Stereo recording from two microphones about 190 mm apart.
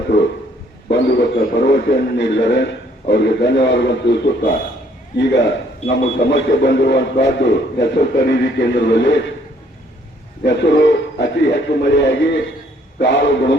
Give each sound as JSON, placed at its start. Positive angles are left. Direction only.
{"t": 0.9, "sound": "a man's voice", "side_deg": 65}
{"t": 10.4, "sound": "a man's voice", "side_deg": 65}